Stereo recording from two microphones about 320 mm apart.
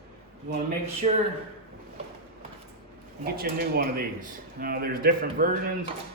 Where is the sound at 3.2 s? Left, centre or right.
Right.